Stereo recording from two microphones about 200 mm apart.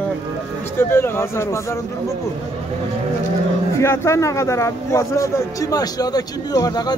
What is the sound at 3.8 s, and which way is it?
Speech, 15° left (ahead or behind).